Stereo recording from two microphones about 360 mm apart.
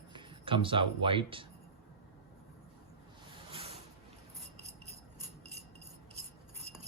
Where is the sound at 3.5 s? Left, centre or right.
Centre.